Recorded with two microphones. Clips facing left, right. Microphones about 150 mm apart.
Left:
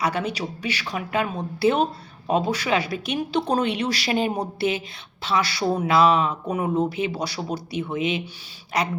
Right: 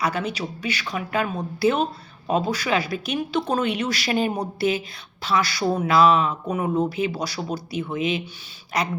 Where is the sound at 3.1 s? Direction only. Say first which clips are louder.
Left 1 dB; 35° left (ahead or behind).